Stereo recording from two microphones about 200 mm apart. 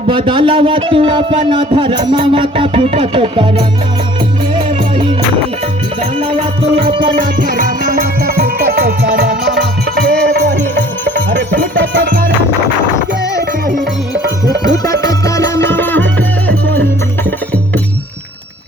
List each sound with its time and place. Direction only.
0.1 s a man's voice: 25° right (ahead or behind)
4.5 s music: 25° right (ahead or behind)
6.9 s a man's voice: 25° right (ahead or behind)
7.2 s music: 45° right (ahead or behind)
15.0 s music: 15° left (ahead or behind)